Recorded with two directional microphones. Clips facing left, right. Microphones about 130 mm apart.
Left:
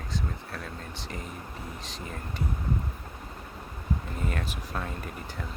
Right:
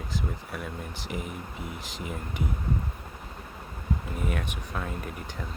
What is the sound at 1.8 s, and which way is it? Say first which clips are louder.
Speech: right 1 dB; 80° right.